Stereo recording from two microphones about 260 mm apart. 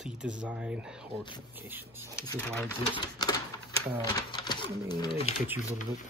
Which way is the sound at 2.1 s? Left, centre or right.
Centre.